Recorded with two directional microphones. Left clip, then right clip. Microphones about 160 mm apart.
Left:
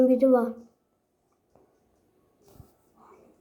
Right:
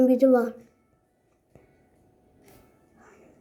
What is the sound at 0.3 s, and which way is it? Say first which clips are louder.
Speech: right 1 dB; 25° right (ahead or behind).